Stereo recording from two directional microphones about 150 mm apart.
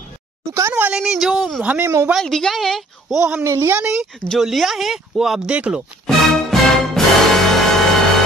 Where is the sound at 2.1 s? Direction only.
Centre (ahead or behind).